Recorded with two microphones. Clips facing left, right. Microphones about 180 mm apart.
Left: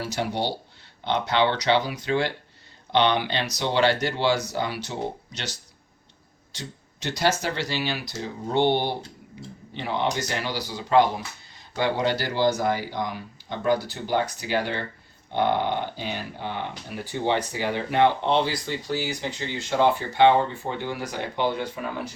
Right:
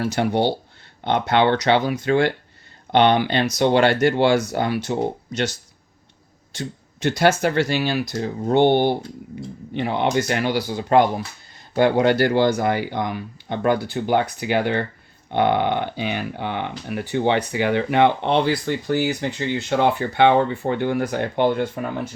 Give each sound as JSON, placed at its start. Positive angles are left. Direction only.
{"t": 0.0, "sound": "speech", "side_deg": -55}